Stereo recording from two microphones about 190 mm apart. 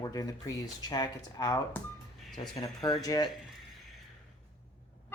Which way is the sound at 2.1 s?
Centre (ahead or behind).